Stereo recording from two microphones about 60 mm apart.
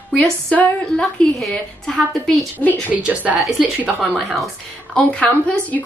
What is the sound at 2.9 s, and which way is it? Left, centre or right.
A woman's voice, right.